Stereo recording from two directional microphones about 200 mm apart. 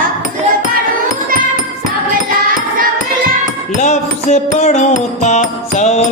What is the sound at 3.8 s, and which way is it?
Music, 35° left (ahead or behind).